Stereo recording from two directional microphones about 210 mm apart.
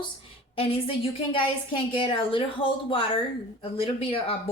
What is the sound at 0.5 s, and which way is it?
A woman's voice, 25° left (ahead or behind).